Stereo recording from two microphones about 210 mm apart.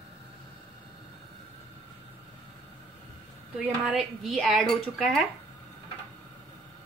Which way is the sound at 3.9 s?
Centre (ahead or behind).